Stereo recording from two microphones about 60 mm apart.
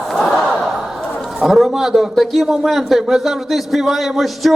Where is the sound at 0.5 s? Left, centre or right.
Centre.